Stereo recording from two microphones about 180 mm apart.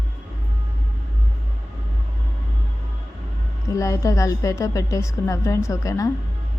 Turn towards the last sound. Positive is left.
turn(degrees=20)  # may be behind; listen again after turning